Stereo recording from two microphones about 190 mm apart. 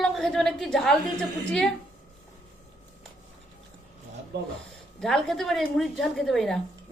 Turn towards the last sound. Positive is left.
turn(degrees=0)  # may be behind; listen again after turning